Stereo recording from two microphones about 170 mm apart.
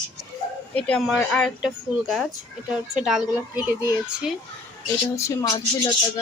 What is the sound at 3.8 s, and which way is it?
Speech, 10° right (ahead or behind).